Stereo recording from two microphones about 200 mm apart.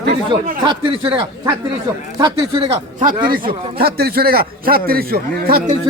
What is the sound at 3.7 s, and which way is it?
A man's voice, 50° right (ahead or behind).